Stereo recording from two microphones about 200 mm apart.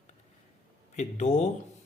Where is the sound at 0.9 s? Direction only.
35° left (ahead or behind).